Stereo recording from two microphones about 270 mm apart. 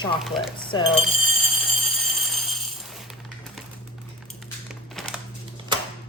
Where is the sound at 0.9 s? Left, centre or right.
Centre.